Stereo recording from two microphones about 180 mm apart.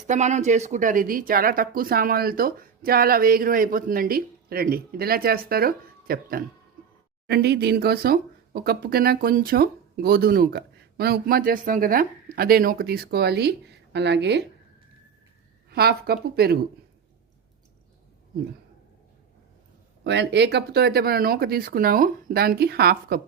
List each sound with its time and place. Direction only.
0.1 s speech: 40° right (ahead or behind); by 14.4 s 70° right (ahead or behind)
15.7 s speech: 60° right (ahead or behind)
20.1 s speech: 70° right (ahead or behind)